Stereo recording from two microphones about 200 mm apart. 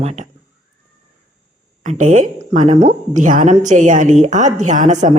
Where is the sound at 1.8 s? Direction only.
40° right (ahead or behind).